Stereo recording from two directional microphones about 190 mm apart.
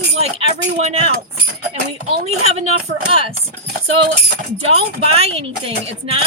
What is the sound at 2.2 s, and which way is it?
Speech, 35° right (ahead or behind).